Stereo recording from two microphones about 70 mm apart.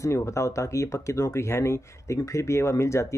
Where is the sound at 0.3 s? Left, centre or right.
Left.